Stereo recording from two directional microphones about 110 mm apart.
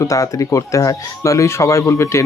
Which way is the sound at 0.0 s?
30° left (ahead or behind).